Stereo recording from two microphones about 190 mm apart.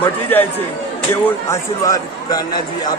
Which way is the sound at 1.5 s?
20° left (ahead or behind).